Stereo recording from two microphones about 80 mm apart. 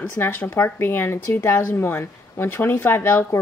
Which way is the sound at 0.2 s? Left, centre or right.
Left.